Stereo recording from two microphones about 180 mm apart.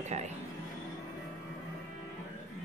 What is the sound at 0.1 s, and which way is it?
Speech, 40° right (ahead or behind).